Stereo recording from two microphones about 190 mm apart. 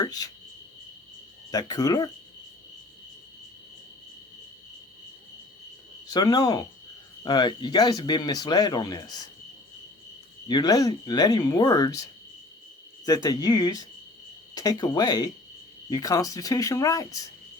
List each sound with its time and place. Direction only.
0.0 s cricket: 20° left (ahead or behind)
1.5 s speech: 20° left (ahead or behind)
6.1 s speech: 20° left (ahead or behind)
10.5 s speech: 20° left (ahead or behind)
13.1 s speech: 20° left (ahead or behind)